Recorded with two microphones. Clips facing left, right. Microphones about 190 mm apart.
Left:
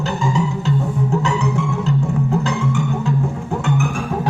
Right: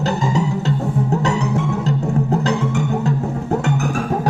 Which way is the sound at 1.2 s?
40° right (ahead or behind).